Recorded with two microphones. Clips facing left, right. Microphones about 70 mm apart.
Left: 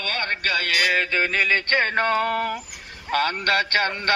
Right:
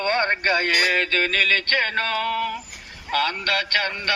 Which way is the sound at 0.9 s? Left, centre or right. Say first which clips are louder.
Even; centre.